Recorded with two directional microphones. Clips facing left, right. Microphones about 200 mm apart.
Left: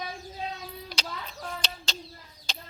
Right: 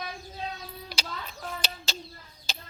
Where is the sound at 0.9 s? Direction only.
5° right (ahead or behind).